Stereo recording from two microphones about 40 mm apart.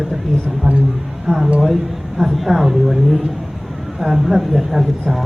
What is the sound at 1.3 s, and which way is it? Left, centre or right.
A woman's voice, centre.